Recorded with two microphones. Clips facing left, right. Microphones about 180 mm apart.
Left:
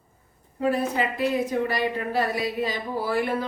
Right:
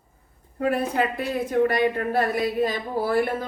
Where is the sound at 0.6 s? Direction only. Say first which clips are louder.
Right 1 dB; 55° right (ahead or behind).